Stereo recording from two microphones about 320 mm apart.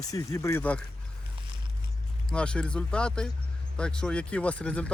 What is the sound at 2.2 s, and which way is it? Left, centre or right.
Speech, centre.